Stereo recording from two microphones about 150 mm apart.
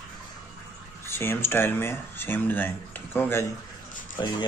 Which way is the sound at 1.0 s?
15° left (ahead or behind).